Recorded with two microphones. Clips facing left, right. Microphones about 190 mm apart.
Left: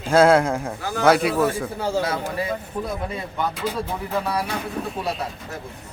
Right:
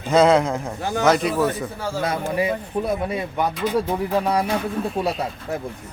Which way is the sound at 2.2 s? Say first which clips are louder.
Right 4 dB; 15° right (ahead or behind).